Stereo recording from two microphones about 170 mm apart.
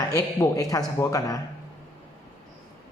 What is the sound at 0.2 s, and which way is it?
A man's voice, 20° left (ahead or behind).